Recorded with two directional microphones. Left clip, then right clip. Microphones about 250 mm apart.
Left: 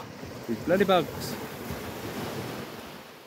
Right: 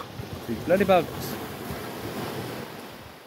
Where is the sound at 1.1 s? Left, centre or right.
Right; by 2.4 s centre.